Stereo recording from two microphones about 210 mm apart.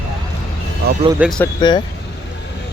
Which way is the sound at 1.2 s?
5° right (ahead or behind).